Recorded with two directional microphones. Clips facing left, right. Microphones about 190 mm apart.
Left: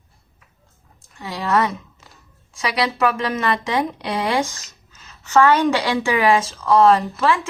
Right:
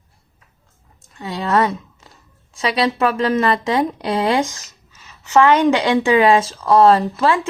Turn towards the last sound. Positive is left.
turn(degrees=-30)  # may be behind; listen again after turning